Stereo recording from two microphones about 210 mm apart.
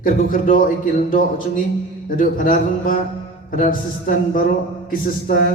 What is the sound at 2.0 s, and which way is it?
A man's voice, 40° left (ahead or behind).